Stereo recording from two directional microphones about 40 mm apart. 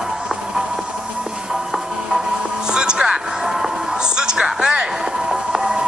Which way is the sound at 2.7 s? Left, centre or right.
Centre.